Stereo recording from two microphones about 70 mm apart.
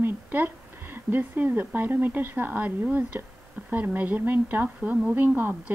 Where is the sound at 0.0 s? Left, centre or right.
Right.